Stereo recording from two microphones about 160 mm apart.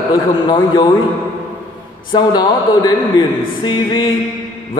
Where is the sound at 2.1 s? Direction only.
25° left (ahead or behind).